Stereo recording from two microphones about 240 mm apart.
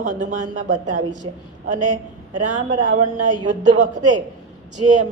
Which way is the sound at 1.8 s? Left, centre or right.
Right.